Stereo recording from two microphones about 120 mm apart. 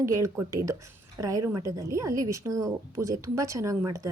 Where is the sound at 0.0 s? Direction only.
25° right (ahead or behind).